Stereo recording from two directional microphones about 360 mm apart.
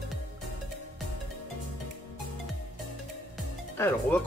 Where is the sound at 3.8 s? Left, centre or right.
Centre.